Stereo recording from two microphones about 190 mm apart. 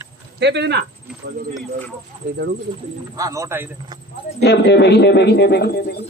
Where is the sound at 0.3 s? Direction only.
65° right (ahead or behind).